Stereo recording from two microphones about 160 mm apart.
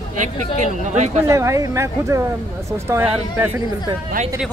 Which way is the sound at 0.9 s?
45° right (ahead or behind).